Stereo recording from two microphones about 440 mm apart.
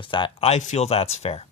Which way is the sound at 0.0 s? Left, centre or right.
Centre.